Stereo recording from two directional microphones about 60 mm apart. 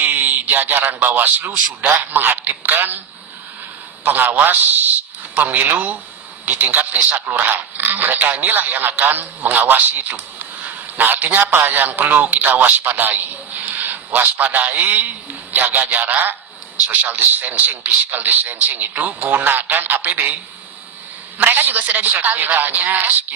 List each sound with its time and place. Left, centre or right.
0.0 s a sound: right
1.0 s a man's voice: right
4.0 s a man's voice: right
21.3 s a man's voice: right